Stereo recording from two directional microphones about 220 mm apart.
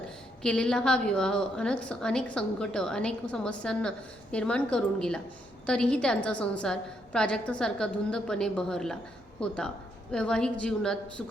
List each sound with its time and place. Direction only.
0.4 s a woman's voice: 5° left (ahead or behind)